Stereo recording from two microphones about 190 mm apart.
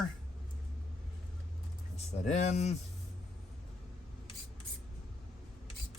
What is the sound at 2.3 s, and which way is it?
Speech, 35° left (ahead or behind).